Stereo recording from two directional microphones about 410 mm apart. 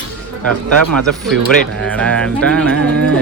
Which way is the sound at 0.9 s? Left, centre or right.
Centre.